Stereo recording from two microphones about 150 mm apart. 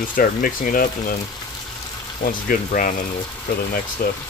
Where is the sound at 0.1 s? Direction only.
65° left (ahead or behind).